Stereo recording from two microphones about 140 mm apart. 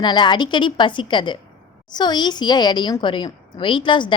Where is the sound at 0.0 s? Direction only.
30° left (ahead or behind).